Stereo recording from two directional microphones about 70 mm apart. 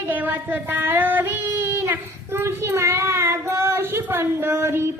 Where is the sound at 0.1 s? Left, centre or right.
Right.